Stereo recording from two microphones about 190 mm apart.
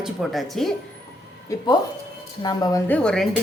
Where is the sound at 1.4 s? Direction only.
20° left (ahead or behind).